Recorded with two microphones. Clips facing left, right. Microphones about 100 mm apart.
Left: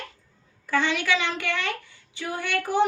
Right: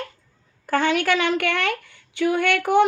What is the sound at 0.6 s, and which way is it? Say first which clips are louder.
A child's voice: right 5 dB; 50° right (ahead or behind).